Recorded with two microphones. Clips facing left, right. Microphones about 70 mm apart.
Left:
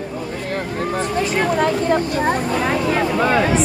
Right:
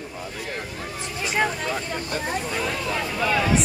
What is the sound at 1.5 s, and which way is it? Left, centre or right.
Speech, left.